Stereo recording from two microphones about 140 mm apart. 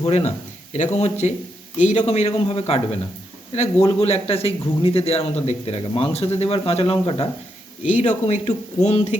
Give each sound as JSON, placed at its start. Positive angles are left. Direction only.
{"t": 0.0, "sound": "a man's voice", "side_deg": 50}
{"t": 7.9, "sound": "speech", "side_deg": 60}